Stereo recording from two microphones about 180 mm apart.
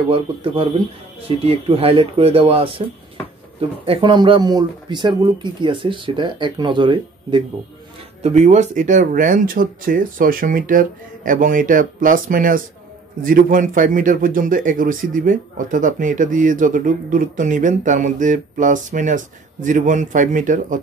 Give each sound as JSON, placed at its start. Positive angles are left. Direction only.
{"t": 0.1, "sound": "speech", "side_deg": -30}
{"t": 3.8, "sound": "speech", "side_deg": -30}
{"t": 8.2, "sound": "a man's voice", "side_deg": -40}